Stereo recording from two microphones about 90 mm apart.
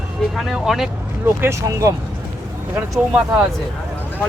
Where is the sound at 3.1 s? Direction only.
15° right (ahead or behind).